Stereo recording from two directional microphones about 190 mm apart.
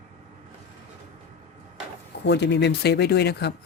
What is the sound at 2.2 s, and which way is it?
Speech, 65° left (ahead or behind).